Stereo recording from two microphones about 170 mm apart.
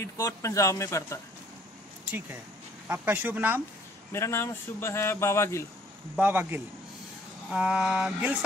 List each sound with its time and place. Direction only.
0.0 s speech: 20° left (ahead or behind)
2.0 s speech: 10° right (ahead or behind)
4.1 s speech: 15° left (ahead or behind)
6.1 s speech: 10° right (ahead or behind)
7.5 s a sound: 5° right (ahead or behind)